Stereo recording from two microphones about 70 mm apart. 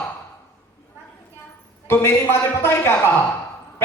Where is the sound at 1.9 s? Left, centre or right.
Left.